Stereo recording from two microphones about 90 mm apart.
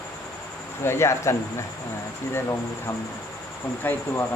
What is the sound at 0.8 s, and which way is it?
Speech, 30° left (ahead or behind).